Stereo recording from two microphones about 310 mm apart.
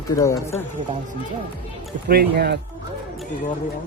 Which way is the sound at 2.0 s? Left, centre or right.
Right.